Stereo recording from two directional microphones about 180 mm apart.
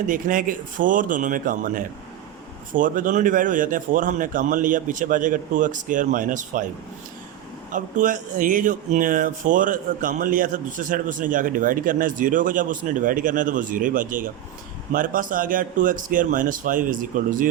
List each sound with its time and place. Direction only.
0.1 s speech: 50° right (ahead or behind)
7.7 s speech: 45° right (ahead or behind)